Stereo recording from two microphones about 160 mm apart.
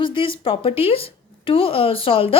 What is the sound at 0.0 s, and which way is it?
Speech, 35° left (ahead or behind).